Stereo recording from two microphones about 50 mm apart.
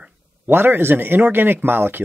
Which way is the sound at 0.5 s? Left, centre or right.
Right.